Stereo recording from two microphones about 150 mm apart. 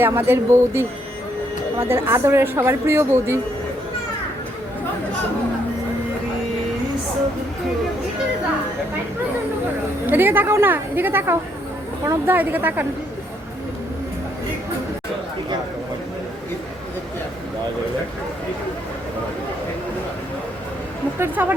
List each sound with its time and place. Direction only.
0.0 s a woman's voice: 15° right (ahead or behind)
10.1 s a woman's voice: 15° right (ahead or behind)
21.2 s a woman's voice: 15° right (ahead or behind)